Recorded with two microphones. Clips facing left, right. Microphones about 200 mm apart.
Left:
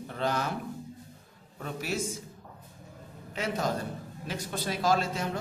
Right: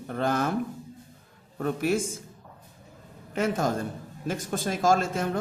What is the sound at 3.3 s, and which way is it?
A man's voice, 50° right (ahead or behind).